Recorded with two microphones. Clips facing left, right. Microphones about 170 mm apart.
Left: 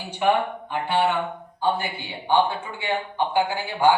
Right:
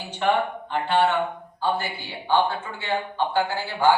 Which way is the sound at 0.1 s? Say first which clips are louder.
Left 1 dB; 10° left (ahead or behind).